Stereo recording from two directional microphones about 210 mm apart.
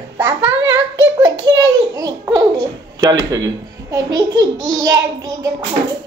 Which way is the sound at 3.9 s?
15° right (ahead or behind).